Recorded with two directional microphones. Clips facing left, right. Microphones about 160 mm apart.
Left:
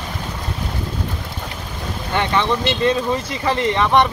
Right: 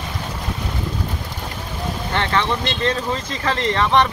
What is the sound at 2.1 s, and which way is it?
Speech, 15° left (ahead or behind).